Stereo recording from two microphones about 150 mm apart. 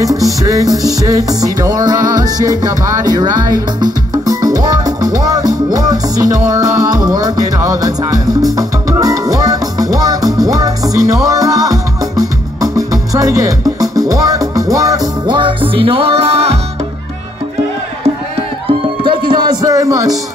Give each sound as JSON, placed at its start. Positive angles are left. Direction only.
{"t": 0.4, "sound": "music", "side_deg": -25}
{"t": 19.0, "sound": "music", "side_deg": -30}